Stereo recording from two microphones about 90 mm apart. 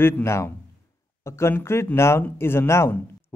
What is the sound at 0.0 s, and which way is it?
Speech, 30° left (ahead or behind).